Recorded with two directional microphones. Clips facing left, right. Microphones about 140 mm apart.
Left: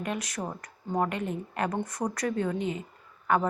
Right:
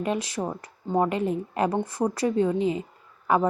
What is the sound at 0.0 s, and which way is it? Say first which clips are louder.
Speech: right 6 dB; 30° right (ahead or behind).